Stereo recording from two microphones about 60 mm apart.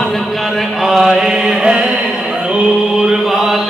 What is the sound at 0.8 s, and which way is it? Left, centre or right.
Mantra, centre.